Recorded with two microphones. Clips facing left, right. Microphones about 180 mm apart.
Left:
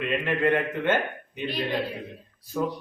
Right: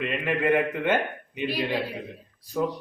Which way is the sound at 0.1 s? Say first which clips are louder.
Even; 10° right (ahead or behind).